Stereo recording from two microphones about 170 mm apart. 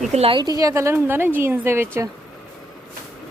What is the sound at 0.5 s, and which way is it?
A woman's voice, 20° right (ahead or behind).